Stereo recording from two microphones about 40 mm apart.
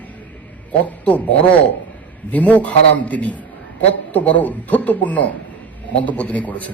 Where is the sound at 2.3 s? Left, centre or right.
Left.